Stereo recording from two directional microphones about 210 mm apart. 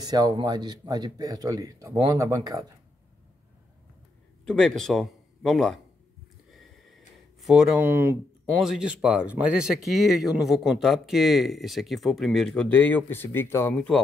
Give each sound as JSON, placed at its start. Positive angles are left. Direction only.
{"t": 0.0, "sound": "speech", "side_deg": -20}
{"t": 4.5, "sound": "a man's voice", "side_deg": 5}
{"t": 7.4, "sound": "speech", "side_deg": -5}